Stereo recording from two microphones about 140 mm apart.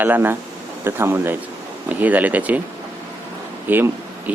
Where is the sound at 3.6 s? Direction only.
15° right (ahead or behind).